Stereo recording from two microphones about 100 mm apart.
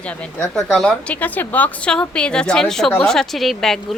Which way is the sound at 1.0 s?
15° left (ahead or behind).